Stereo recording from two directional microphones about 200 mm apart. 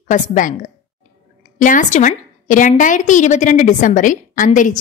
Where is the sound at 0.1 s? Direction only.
40° left (ahead or behind).